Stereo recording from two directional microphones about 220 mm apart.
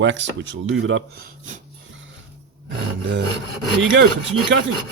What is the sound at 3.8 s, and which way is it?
Speech, 55° right (ahead or behind).